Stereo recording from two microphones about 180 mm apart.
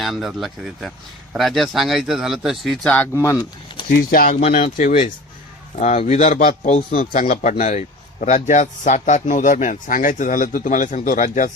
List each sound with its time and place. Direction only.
0.0 s speech: centre (ahead or behind); by 3.4 s 15° left (ahead or behind)
4.1 s a man's voice: 55° left (ahead or behind)
4.4 s a man's voice: 40° left (ahead or behind)